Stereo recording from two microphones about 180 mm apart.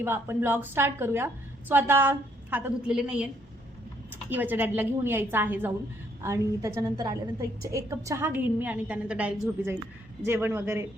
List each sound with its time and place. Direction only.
0.0 s a woman's voice: 10° right (ahead or behind)
4.3 s a woman's voice: 10° right (ahead or behind)